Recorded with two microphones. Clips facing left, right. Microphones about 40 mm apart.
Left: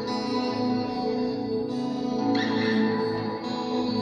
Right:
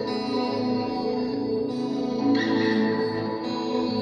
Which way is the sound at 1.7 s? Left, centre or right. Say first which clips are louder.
Right 1 dB; right.